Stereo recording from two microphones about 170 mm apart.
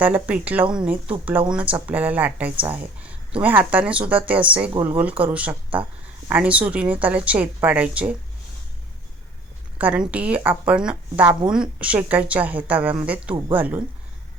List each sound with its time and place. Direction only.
0.0 s a woman's voice: 10° right (ahead or behind)
9.7 s a woman's voice: 10° right (ahead or behind)